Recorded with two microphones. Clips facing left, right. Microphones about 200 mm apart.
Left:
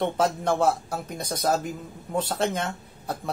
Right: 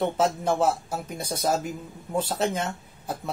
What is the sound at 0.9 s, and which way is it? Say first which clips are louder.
Speech: even; 5° right (ahead or behind).